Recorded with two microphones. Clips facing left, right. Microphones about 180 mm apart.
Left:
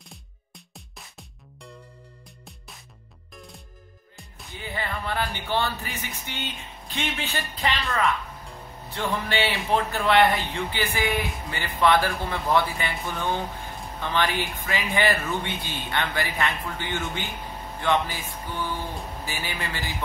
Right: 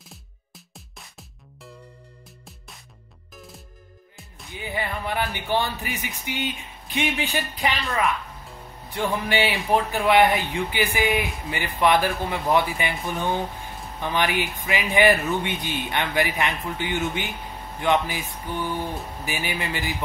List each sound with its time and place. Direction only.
0.7 s music: centre (ahead or behind)
3.3 s music: centre (ahead or behind)
4.6 s speech: 15° right (ahead or behind)
8.9 s speech: 15° right (ahead or behind)